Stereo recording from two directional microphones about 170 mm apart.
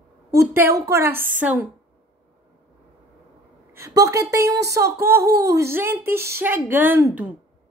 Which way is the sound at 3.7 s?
20° right (ahead or behind).